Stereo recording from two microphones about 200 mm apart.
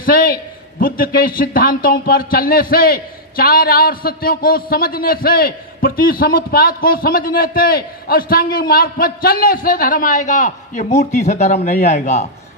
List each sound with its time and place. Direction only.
0.0 s a man's voice: 45° left (ahead or behind)